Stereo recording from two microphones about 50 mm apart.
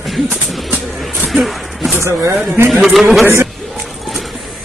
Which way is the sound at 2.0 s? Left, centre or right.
Right.